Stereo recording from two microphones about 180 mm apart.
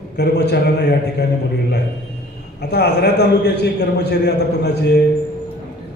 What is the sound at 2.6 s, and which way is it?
A man's voice, 65° left (ahead or behind).